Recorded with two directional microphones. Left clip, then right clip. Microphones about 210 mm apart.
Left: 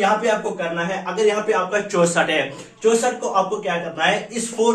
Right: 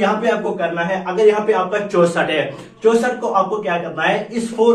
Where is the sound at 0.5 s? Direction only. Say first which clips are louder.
Right 4 dB; 10° left (ahead or behind).